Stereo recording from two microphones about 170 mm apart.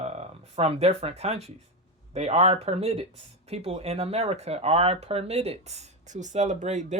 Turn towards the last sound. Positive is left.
turn(degrees=-45)  # may be behind; listen again after turning